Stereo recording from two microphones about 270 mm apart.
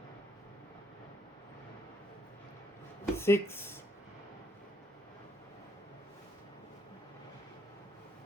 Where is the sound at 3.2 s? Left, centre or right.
Centre.